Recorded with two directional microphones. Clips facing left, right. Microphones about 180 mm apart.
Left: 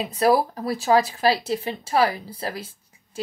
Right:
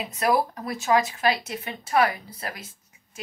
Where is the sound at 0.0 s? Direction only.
35° left (ahead or behind).